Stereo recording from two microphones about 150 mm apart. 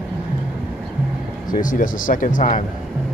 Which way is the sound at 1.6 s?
65° left (ahead or behind).